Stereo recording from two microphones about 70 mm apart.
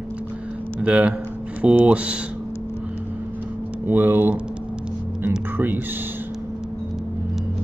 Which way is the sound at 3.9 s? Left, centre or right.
Right.